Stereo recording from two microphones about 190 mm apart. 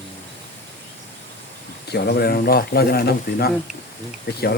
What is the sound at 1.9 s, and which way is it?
Speech, 55° left (ahead or behind).